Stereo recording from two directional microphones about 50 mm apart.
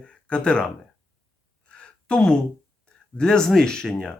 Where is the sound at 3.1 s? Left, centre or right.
Centre.